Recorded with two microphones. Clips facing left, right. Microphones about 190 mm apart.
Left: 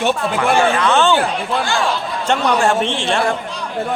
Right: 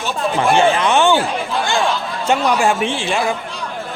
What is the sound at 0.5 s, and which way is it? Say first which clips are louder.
Speech: even; 20° right (ahead or behind).